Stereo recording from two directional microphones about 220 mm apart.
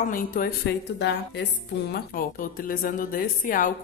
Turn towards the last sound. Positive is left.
turn(degrees=40)  # may be behind; listen again after turning